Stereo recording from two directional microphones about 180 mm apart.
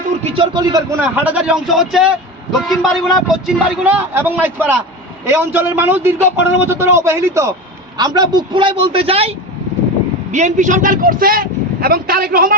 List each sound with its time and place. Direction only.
0.3 s a man's voice: 25° right (ahead or behind)
10.3 s speech: 45° right (ahead or behind)